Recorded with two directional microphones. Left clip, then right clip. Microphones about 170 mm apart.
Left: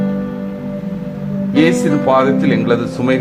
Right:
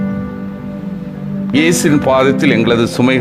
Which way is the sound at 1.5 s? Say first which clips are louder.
Right 1 dB; 25° right (ahead or behind).